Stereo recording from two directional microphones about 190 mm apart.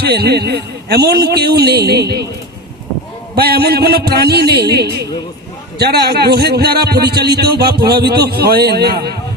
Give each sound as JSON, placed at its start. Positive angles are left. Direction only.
{"t": 0.0, "sound": "a man's voice", "side_deg": -60}
{"t": 3.3, "sound": "a man's voice", "side_deg": -55}